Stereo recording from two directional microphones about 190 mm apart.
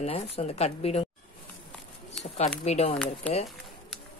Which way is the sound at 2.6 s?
35° left (ahead or behind).